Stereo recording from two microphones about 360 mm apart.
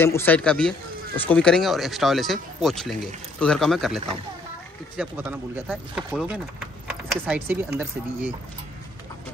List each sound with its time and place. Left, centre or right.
0.0 s speech: centre